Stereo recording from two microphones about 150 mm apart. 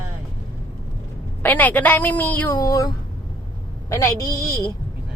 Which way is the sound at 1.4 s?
10° left (ahead or behind).